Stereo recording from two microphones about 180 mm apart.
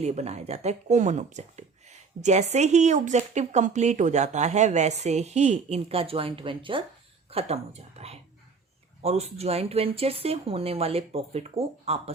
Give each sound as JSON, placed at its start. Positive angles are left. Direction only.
{"t": 0.0, "sound": "a woman's voice", "side_deg": -40}